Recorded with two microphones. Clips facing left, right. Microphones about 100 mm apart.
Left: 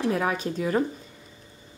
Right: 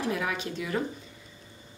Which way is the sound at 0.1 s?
40° left (ahead or behind).